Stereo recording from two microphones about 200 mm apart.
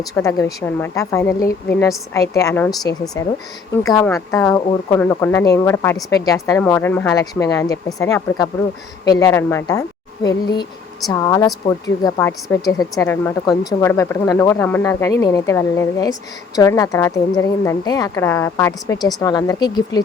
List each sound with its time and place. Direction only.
0.1 s a woman's voice: 15° left (ahead or behind)